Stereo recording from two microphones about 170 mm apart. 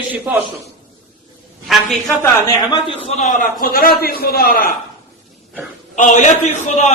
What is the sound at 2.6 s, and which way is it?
Speech, 20° left (ahead or behind).